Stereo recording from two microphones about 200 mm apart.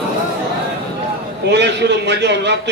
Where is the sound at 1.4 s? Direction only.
60° right (ahead or behind).